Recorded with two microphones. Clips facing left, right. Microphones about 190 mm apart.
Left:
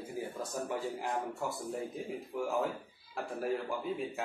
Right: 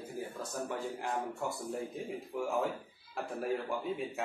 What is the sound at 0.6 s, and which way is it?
Speech, centre (ahead or behind).